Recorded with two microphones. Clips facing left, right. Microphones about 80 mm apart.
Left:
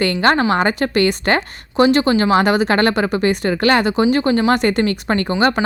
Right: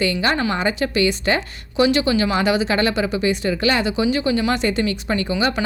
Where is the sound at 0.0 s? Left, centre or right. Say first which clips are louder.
Left 5 dB; left.